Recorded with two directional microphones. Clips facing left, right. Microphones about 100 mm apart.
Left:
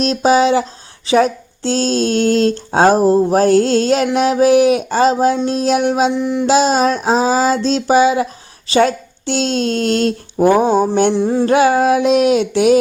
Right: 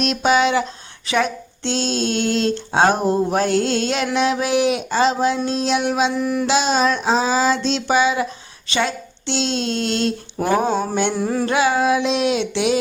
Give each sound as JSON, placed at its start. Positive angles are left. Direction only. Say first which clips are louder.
{"t": 0.0, "sound": "a woman's voice", "louder": "left 4 dB", "side_deg": 35}
{"t": 6.1, "sound": "a sound", "louder": "left 4 dB", "side_deg": 20}
{"t": 6.5, "sound": "a woman's voice", "louder": "left 6 dB", "side_deg": 40}
{"t": 10.3, "sound": "mantra", "louder": "left 8 dB", "side_deg": 15}
{"t": 11.1, "sound": "a sound", "louder": "left 6 dB", "side_deg": 25}
{"t": 11.4, "sound": "a woman's voice", "louder": "left 5 dB", "side_deg": 40}